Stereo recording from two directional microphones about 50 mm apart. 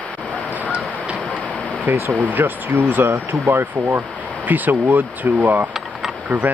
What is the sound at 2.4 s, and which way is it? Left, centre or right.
Speech, right.